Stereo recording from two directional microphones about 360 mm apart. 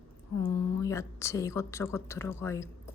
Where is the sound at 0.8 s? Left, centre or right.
Centre.